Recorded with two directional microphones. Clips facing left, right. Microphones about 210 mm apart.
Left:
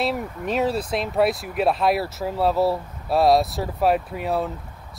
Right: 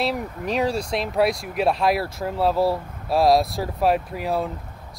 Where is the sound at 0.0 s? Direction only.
Centre (ahead or behind).